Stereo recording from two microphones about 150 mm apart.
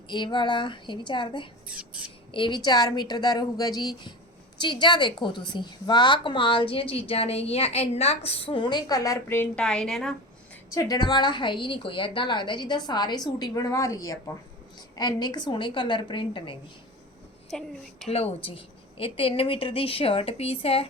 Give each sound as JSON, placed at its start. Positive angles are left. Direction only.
{"t": 0.1, "sound": "a woman's voice", "side_deg": 30}
{"t": 1.6, "sound": "speech", "side_deg": -10}
{"t": 2.0, "sound": "a woman's voice", "side_deg": 35}
{"t": 10.8, "sound": "a woman's voice", "side_deg": 25}
{"t": 17.5, "sound": "a woman's voice", "side_deg": 0}
{"t": 18.1, "sound": "a woman's voice", "side_deg": 40}